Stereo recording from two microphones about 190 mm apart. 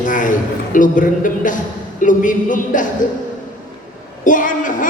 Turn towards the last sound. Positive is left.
turn(degrees=45)  # may be behind; listen again after turning